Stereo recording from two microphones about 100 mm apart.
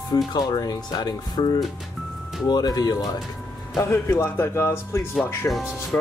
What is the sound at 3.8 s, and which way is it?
Speech, 30° left (ahead or behind).